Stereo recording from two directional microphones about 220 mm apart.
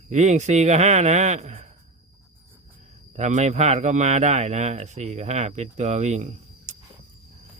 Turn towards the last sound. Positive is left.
turn(degrees=-30)  # may be behind; listen again after turning